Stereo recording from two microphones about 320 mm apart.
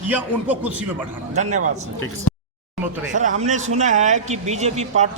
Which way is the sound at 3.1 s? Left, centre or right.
Right.